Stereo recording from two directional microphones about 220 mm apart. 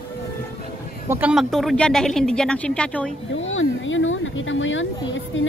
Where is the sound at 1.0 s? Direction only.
10° right (ahead or behind).